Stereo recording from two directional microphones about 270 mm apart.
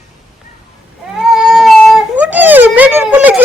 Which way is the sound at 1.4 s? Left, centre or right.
Centre.